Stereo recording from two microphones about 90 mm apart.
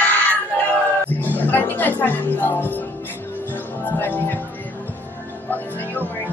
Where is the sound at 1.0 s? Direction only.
20° left (ahead or behind).